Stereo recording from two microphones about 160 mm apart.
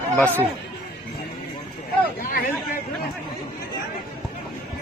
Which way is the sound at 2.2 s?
60° left (ahead or behind).